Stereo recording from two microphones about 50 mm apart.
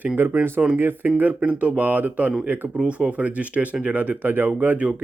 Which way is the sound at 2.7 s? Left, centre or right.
Right.